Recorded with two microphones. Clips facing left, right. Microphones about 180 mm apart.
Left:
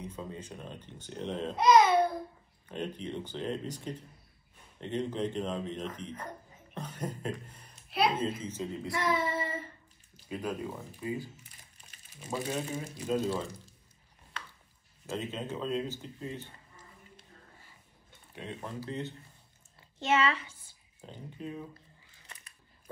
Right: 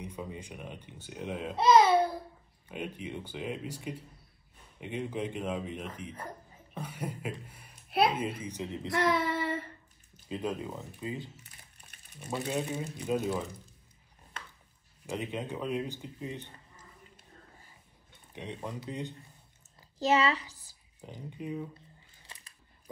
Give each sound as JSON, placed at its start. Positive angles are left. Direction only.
{"t": 0.0, "sound": "speech", "side_deg": -15}
{"t": 1.6, "sound": "speech", "side_deg": -30}
{"t": 2.7, "sound": "speech", "side_deg": -10}
{"t": 8.9, "sound": "child singing", "side_deg": -70}
{"t": 10.2, "sound": "speech", "side_deg": -20}
{"t": 12.4, "sound": "speech", "side_deg": -20}
{"t": 15.0, "sound": "speech", "side_deg": -15}
{"t": 18.3, "sound": "speech", "side_deg": -20}
{"t": 20.0, "sound": "speech", "side_deg": -35}
{"t": 21.0, "sound": "speech", "side_deg": -15}
{"t": 22.2, "sound": "camera", "side_deg": -30}